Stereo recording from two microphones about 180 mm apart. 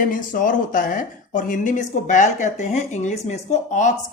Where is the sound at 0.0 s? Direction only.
50° left (ahead or behind).